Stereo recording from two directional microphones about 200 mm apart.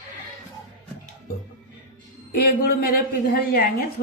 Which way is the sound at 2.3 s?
50° left (ahead or behind).